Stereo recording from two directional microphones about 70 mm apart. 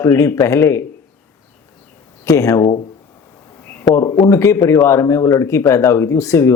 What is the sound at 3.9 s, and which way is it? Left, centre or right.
Speech, left.